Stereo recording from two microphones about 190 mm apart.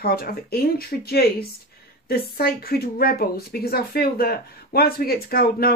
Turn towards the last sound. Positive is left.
turn(degrees=50)  # may be behind; listen again after turning